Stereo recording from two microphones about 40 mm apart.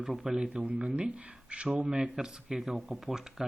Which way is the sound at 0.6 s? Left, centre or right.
Right.